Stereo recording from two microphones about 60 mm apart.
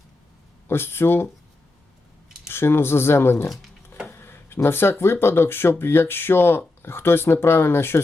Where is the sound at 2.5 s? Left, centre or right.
Left.